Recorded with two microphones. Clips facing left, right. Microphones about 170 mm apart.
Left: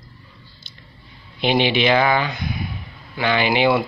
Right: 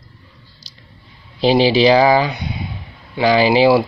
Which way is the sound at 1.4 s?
35° right (ahead or behind).